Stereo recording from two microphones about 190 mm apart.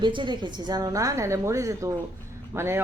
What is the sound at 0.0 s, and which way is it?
A woman's voice, 25° right (ahead or behind).